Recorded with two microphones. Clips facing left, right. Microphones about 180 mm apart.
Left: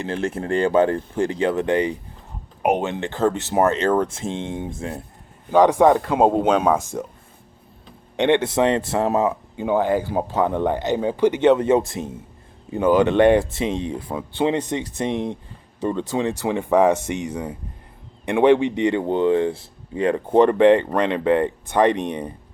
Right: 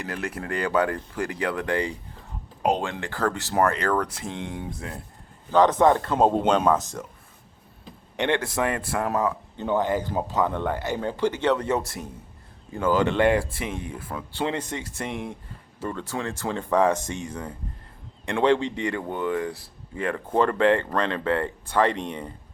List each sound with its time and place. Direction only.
0.0 s speech: 25° left (ahead or behind)
8.2 s speech: 20° left (ahead or behind)
9.6 s speech: 10° left (ahead or behind)